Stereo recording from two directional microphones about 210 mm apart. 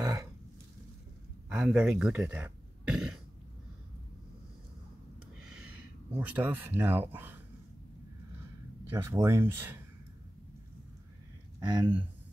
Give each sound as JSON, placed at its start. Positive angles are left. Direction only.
{"t": 1.5, "sound": "speech", "side_deg": 0}
{"t": 6.1, "sound": "speech", "side_deg": -5}
{"t": 8.8, "sound": "speech", "side_deg": -15}
{"t": 11.6, "sound": "speech", "side_deg": -20}